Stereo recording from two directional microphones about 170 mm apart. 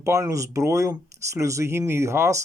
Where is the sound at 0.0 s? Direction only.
15° right (ahead or behind).